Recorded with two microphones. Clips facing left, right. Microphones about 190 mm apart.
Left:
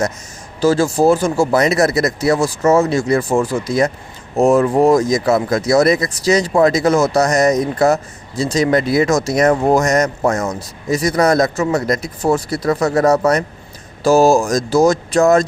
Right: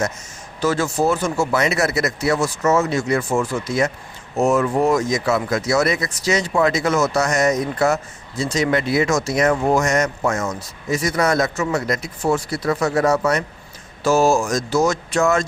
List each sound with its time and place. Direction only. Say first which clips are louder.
0.6 s speech: left 6 dB; 30° left (ahead or behind)